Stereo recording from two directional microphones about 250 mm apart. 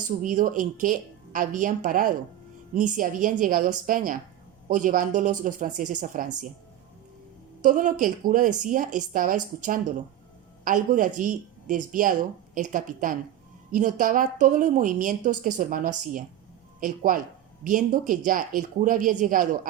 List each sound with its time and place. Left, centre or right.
0.0 s a woman's voice: right
7.6 s a woman's voice: right